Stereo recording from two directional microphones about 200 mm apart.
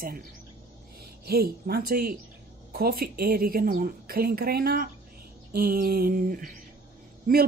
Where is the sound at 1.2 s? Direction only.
50° right (ahead or behind).